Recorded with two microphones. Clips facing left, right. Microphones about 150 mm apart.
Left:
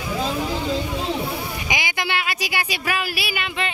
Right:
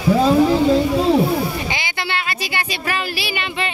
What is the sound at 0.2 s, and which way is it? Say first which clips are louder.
Vehicle: right 10 dB; 35° right (ahead or behind).